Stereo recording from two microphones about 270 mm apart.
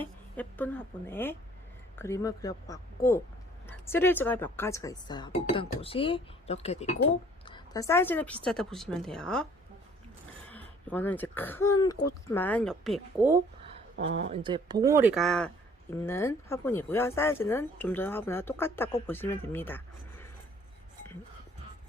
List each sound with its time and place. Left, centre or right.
0.0 s a woman's voice: centre
10.5 s speech: centre
12.0 s speech: left
12.3 s a woman's voice: centre
14.0 s speech: right; by 20.2 s centre